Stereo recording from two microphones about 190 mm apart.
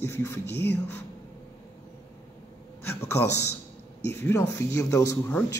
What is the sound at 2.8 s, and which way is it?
A woman's voice, 10° left (ahead or behind).